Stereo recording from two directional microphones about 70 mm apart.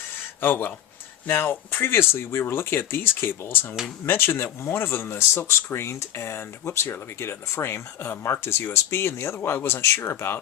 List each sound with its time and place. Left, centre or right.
0.4 s speech: left